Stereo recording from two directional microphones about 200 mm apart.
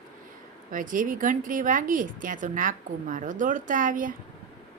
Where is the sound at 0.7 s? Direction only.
40° right (ahead or behind).